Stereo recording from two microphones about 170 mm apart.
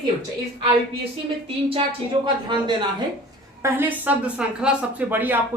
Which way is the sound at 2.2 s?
30° right (ahead or behind).